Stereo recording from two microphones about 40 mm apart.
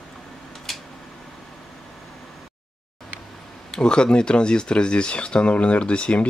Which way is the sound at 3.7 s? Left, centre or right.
Left.